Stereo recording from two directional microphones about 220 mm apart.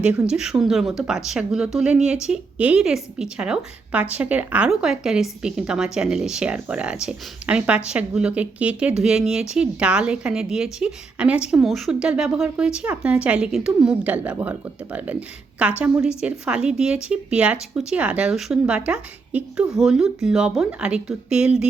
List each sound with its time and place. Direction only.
0.0 s a woman's voice: 5° right (ahead or behind)